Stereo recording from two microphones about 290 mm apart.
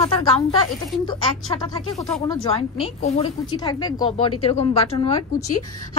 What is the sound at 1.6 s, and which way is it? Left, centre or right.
A woman's voice, centre.